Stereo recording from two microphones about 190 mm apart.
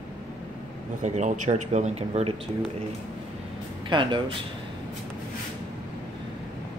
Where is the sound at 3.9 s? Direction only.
25° right (ahead or behind).